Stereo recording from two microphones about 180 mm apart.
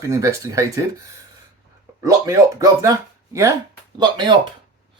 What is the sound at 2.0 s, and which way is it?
Speech, 20° right (ahead or behind).